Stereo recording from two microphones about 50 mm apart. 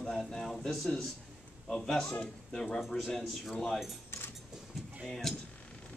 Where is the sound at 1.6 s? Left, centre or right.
Centre.